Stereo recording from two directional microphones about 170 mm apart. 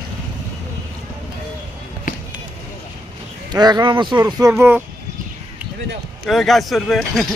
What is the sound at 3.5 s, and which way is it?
Speech, 25° right (ahead or behind).